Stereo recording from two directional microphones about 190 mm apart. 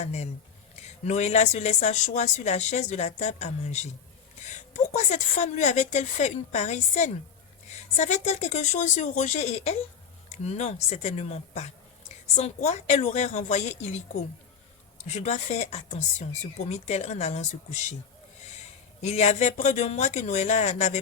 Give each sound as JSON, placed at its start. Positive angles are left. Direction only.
{"t": 0.0, "sound": "a woman's voice", "side_deg": 35}
{"t": 19.0, "sound": "a woman's voice", "side_deg": 35}